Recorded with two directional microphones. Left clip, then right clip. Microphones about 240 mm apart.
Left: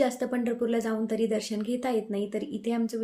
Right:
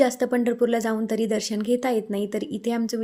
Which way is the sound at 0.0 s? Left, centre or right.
Right.